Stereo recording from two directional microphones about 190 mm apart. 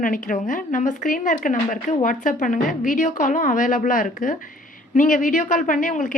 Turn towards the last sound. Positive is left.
turn(degrees=45)  # may be behind; listen again after turning